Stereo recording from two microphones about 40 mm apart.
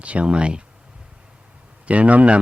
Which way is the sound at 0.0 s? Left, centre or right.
Right.